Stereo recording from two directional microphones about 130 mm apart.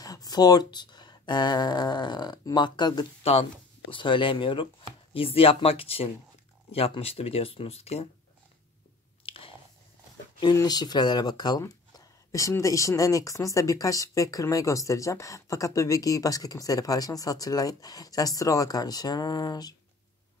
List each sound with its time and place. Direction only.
0.0 s speech: 30° left (ahead or behind); by 8.1 s 50° left (ahead or behind)
9.2 s chewing: 45° left (ahead or behind)
10.4 s speech: 30° left (ahead or behind)